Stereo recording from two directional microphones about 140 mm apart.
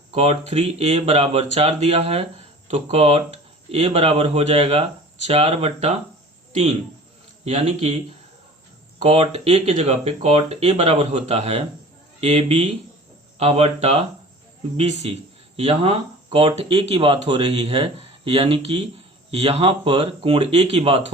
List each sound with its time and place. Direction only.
0.1 s speech: 50° right (ahead or behind)
7.4 s speech: 50° right (ahead or behind)
9.0 s speech: 50° right (ahead or behind)